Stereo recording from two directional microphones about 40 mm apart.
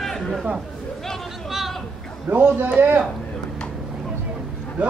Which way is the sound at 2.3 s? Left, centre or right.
Right.